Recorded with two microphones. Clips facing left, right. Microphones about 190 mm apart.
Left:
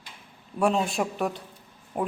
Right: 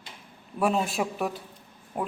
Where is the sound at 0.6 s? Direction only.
5° right (ahead or behind).